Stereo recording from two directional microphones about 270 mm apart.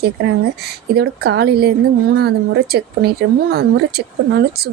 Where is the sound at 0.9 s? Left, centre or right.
Right.